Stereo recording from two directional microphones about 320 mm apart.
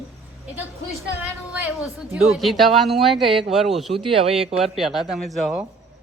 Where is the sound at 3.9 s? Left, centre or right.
Centre.